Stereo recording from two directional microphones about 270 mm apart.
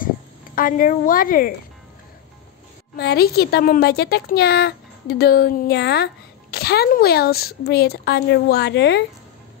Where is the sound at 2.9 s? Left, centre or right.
Left.